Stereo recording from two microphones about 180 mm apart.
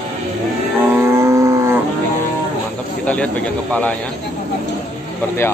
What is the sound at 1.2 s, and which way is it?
Livestock, 15° right (ahead or behind).